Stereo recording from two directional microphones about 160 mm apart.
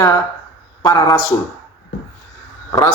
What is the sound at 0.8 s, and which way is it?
Speech, 25° left (ahead or behind).